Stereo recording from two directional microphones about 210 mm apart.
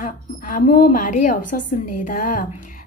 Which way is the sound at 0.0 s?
40° left (ahead or behind).